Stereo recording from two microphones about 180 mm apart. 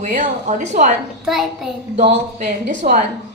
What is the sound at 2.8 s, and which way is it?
Speech, 50° right (ahead or behind).